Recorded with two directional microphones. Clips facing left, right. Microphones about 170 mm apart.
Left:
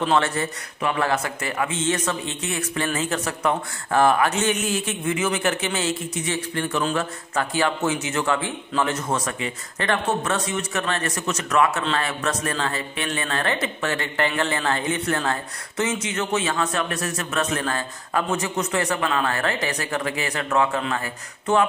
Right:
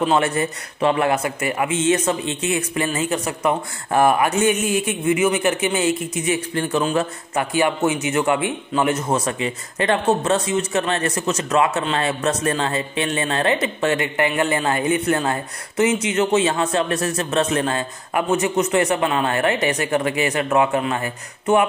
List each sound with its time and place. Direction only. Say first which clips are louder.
0.0 s a man's voice: right 3 dB; 15° right (ahead or behind)
0.7 s a man's voice: right 5 dB; 25° right (ahead or behind)
4.6 s a man's voice: right 4 dB; 55° right (ahead or behind)
4.8 s a man's voice: right 6 dB; 10° right (ahead or behind)